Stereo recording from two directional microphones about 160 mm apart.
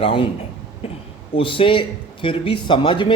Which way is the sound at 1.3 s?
35° left (ahead or behind).